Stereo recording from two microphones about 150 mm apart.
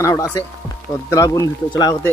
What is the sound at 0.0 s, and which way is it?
Speech, 20° left (ahead or behind).